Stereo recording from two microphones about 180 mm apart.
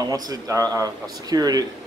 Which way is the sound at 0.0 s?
20° right (ahead or behind).